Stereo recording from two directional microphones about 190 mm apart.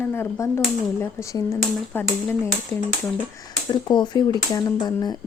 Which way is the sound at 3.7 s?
25° left (ahead or behind).